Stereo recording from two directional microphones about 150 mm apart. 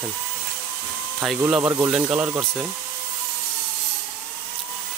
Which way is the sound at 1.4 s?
15° right (ahead or behind).